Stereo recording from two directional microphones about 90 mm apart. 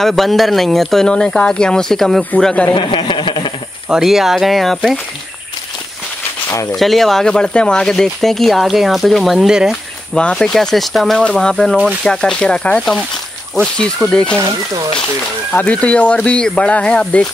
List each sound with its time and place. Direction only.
0.0 s speech: centre (ahead or behind)
2.7 s a sound: 60° left (ahead or behind)
3.9 s speech: 5° right (ahead or behind)
6.5 s speech: 35° left (ahead or behind)
6.8 s speech: centre (ahead or behind)
10.1 s speech: 10° left (ahead or behind)
14.4 s speech: 40° right (ahead or behind)
15.6 s speech: 15° left (ahead or behind)